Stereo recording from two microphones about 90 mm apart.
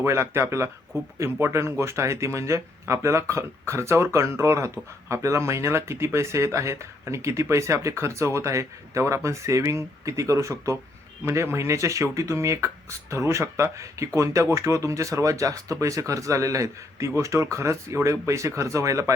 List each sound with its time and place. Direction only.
0.0 s speech: 30° right (ahead or behind)